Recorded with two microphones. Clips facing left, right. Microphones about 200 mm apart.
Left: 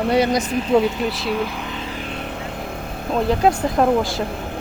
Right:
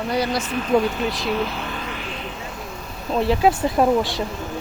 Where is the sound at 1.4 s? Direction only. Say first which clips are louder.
Left 1 dB; 15° left (ahead or behind).